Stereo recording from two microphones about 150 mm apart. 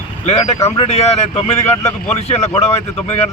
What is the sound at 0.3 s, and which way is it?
Speech, 45° left (ahead or behind).